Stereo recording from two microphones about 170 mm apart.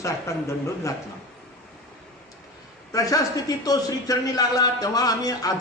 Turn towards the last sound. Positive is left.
turn(degrees=20)  # may be behind; listen again after turning